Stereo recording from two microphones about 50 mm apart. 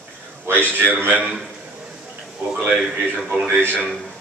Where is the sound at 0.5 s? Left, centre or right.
Left.